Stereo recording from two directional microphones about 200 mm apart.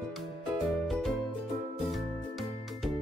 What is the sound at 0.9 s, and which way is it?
Music, centre (ahead or behind).